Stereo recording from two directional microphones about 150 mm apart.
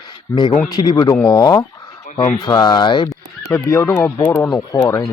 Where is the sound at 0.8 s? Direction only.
30° left (ahead or behind).